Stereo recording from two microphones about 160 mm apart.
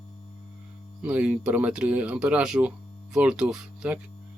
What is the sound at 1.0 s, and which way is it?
Speech, 10° right (ahead or behind).